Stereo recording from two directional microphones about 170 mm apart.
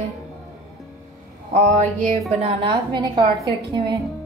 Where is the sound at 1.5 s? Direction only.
45° right (ahead or behind).